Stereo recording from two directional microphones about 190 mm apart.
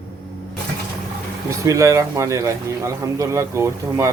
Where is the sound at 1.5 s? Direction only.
15° right (ahead or behind).